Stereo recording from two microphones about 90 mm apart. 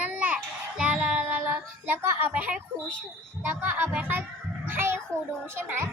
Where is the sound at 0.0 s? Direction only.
15° right (ahead or behind).